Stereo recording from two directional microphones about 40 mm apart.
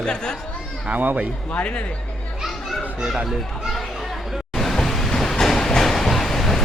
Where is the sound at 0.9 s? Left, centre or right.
Right.